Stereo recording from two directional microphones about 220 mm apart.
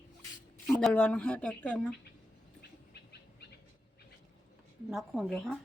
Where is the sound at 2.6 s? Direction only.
50° left (ahead or behind).